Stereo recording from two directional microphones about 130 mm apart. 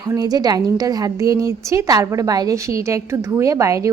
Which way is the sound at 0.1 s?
30° right (ahead or behind).